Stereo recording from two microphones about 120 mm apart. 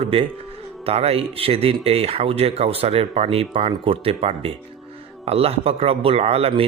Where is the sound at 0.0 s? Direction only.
50° right (ahead or behind).